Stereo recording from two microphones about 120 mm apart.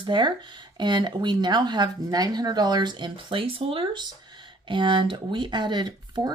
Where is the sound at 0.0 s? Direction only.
40° right (ahead or behind).